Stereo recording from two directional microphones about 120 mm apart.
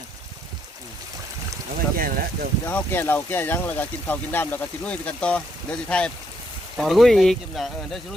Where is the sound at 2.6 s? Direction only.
15° left (ahead or behind).